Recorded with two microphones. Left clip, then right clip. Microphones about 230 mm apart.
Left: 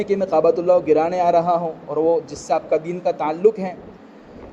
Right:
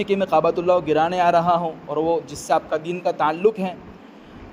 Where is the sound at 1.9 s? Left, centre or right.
Right.